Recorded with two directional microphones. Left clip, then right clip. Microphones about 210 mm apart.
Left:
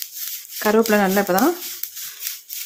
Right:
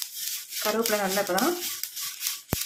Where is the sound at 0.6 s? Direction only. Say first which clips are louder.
Left 9 dB; 55° left (ahead or behind).